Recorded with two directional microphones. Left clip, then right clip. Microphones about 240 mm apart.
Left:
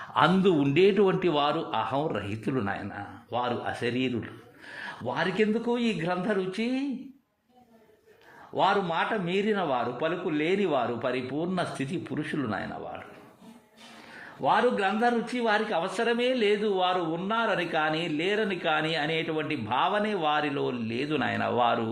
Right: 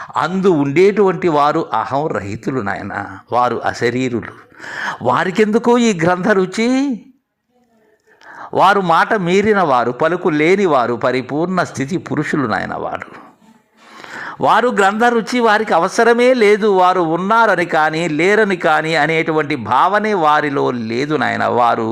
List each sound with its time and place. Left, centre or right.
0.5 s a man's voice: right
0.9 s speech: centre
1.3 s a man's voice: right
8.5 s a man's voice: right
14.2 s a man's voice: right